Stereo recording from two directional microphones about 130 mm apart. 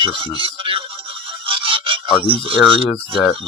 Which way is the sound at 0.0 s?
40° right (ahead or behind).